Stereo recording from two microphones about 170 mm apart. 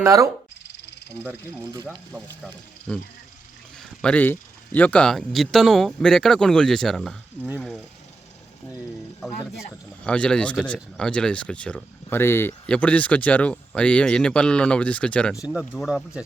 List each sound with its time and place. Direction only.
0.0 s speech: 20° right (ahead or behind)
2.9 s speech: 5° left (ahead or behind)
9.6 s speech: 5° left (ahead or behind)